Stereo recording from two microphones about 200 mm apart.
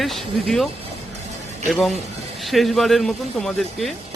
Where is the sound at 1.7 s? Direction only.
Centre (ahead or behind).